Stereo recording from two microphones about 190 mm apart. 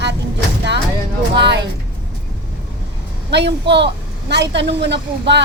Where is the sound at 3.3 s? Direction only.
65° right (ahead or behind).